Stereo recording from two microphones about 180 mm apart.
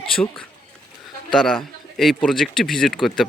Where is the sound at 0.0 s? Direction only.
5° left (ahead or behind).